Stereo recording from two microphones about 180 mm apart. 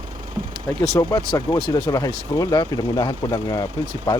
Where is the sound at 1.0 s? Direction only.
25° left (ahead or behind).